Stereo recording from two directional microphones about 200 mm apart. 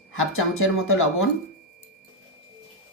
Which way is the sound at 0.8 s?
90° left.